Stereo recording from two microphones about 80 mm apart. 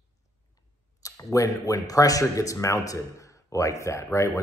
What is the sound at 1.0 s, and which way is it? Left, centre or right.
Speech, left.